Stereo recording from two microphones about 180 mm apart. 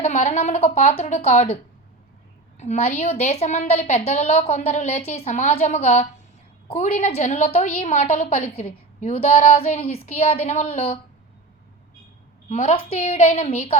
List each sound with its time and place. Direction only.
0.0 s a woman's voice: 40° left (ahead or behind)
2.6 s a woman's voice: 35° left (ahead or behind)
12.5 s a woman's voice: 35° left (ahead or behind)